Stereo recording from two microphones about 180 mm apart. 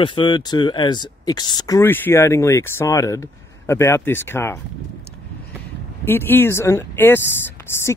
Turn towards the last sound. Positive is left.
turn(degrees=15)  # may be behind; listen again after turning